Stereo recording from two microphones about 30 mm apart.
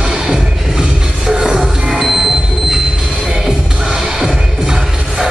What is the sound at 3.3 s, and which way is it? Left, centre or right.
Music, right.